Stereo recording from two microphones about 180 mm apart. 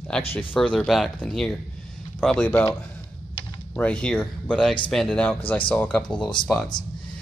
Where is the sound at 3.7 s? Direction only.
5° left (ahead or behind).